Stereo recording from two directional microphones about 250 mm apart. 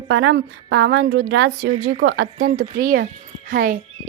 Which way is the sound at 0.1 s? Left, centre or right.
Right.